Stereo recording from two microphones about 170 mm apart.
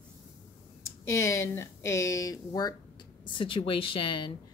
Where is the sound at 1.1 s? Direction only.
15° left (ahead or behind).